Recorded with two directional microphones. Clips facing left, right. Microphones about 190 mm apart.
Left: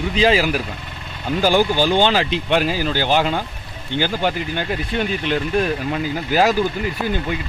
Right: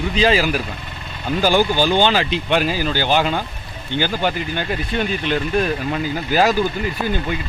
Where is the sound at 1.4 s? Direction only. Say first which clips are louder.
Even; 30° left (ahead or behind).